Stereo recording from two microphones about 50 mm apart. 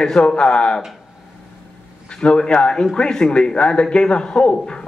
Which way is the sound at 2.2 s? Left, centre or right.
Left.